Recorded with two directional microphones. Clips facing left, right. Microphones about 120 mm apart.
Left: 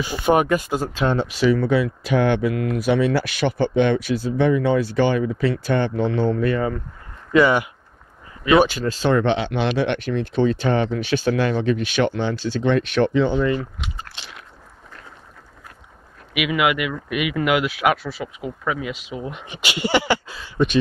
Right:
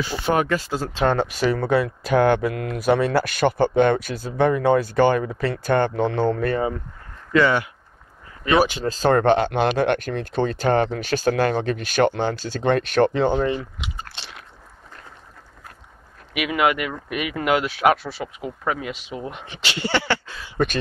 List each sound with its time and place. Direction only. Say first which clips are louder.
0.0 s speech: left 3 dB; 15° left (ahead or behind)
1.0 s speech: left 1 dB; 50° right (ahead or behind)
7.3 s speech: left 2 dB; 15° left (ahead or behind)
8.8 s speech: right 1 dB; 40° right (ahead or behind)
14.0 s biting: even; 30° right (ahead or behind)
16.3 s speech: even; 35° right (ahead or behind)
18.7 s speech: even; 40° right (ahead or behind)
19.0 s speech: left 1 dB; 10° left (ahead or behind)